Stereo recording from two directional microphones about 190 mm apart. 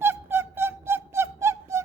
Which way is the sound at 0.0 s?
10° right (ahead or behind).